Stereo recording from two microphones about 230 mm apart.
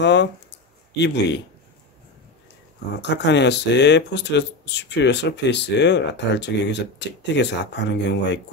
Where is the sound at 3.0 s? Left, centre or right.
Left.